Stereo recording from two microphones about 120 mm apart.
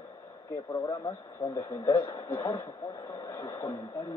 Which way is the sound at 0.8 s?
25° left (ahead or behind).